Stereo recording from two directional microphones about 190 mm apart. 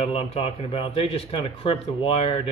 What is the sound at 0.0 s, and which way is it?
Speech, 30° left (ahead or behind).